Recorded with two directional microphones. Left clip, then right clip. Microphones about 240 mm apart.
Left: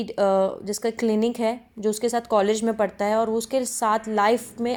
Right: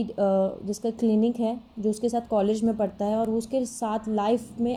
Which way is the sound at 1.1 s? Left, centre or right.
Left.